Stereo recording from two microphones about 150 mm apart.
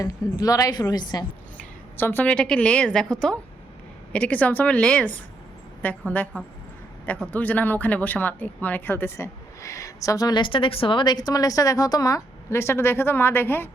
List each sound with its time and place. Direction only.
0.0 s a woman's voice: 25° left (ahead or behind)
2.0 s speech: 15° left (ahead or behind)
7.3 s speech: 10° left (ahead or behind)